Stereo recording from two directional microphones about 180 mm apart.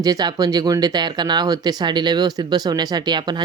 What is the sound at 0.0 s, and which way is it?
Speech, 20° right (ahead or behind).